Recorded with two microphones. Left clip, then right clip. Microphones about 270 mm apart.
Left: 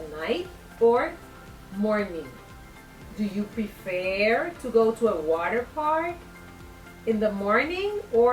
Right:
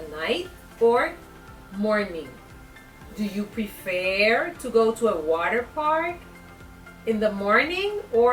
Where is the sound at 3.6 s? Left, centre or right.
Centre.